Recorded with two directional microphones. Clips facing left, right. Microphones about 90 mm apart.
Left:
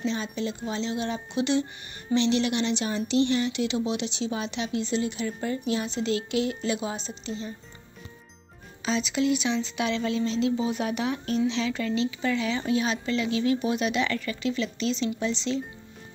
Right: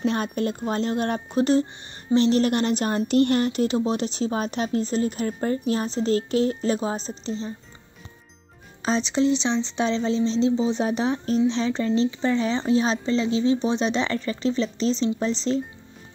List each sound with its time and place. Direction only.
0.0 s a woman's voice: 55° right (ahead or behind); by 7.5 s 35° right (ahead or behind)
8.8 s speech: 35° right (ahead or behind)